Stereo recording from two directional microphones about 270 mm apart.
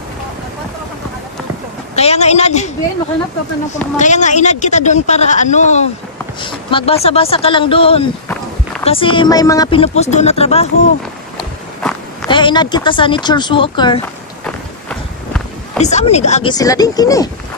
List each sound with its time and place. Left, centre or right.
2.0 s speech: left
3.7 s speech: left
12.3 s speech: centre
14.4 s run: centre
15.8 s speech: left
16.5 s speech: centre